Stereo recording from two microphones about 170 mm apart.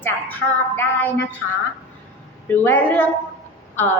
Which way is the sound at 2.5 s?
10° left (ahead or behind).